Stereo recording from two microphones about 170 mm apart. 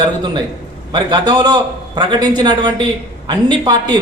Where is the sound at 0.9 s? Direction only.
25° right (ahead or behind).